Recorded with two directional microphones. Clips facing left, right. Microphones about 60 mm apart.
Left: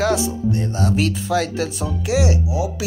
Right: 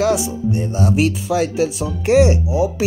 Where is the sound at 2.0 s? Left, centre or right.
Right.